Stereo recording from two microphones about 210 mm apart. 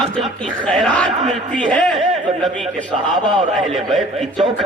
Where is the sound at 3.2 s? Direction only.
20° right (ahead or behind).